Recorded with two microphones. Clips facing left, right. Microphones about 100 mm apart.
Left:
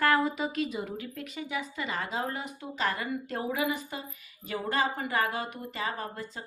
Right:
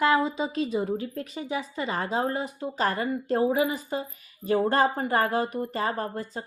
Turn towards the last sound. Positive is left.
turn(degrees=-35)  # may be behind; listen again after turning